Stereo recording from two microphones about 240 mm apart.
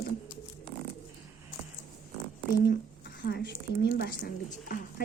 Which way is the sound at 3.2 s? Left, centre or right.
Left.